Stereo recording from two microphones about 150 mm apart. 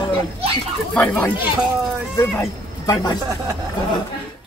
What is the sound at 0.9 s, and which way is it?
Speech, 10° left (ahead or behind).